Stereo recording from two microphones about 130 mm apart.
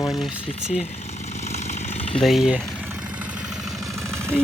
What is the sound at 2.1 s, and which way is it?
Speech, centre (ahead or behind).